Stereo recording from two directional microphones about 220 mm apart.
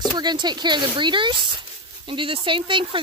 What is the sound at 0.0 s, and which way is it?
Speech, 20° right (ahead or behind).